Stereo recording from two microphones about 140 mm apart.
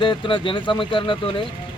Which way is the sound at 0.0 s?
35° left (ahead or behind).